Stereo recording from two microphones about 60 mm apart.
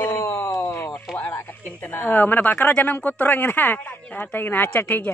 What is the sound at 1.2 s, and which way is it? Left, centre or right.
Speech, left.